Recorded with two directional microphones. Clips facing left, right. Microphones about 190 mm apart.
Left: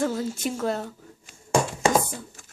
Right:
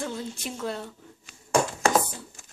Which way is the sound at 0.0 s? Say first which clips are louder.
Left 7 dB; 45° left (ahead or behind).